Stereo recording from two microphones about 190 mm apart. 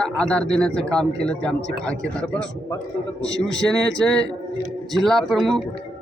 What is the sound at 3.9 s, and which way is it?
Speech, 5° left (ahead or behind).